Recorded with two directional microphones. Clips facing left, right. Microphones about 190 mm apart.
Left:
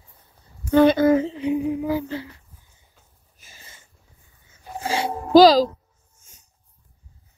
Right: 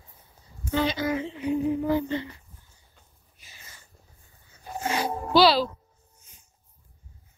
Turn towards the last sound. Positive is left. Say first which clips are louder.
# left 1 dB
turn(degrees=45)  # may be behind; listen again after turning